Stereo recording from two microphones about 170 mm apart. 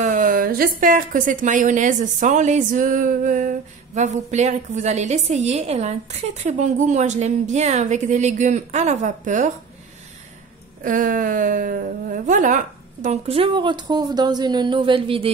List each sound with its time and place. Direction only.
0.0 s a woman's voice: 55° right (ahead or behind)
10.8 s speech: 50° right (ahead or behind); by 15.3 s 35° right (ahead or behind)